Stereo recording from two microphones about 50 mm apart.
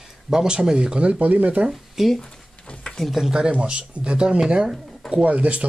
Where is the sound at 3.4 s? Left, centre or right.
Right.